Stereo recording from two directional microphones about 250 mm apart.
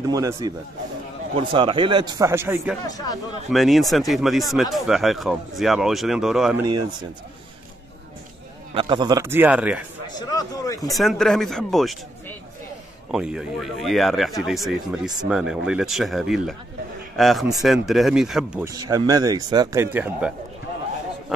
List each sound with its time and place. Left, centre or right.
0.0 s speech: centre
8.7 s speech: centre
10.0 s speech: centre
10.9 s speech: centre
18.8 s speech: centre